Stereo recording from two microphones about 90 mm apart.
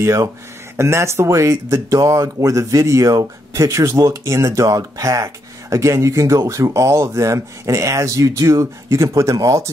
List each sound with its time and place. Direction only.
0.0 s speech: 35° right (ahead or behind)